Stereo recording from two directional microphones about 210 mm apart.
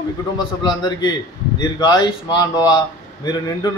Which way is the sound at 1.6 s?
20° left (ahead or behind).